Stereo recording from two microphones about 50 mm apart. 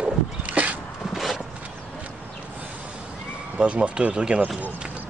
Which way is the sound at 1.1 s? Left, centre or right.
Centre.